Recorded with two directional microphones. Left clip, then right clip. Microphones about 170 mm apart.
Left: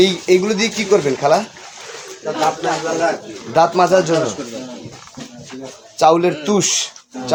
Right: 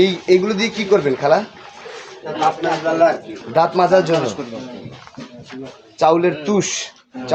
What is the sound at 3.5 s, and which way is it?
Speech, 15° left (ahead or behind).